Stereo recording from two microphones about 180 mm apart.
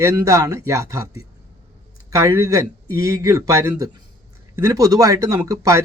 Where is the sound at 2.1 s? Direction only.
15° right (ahead or behind).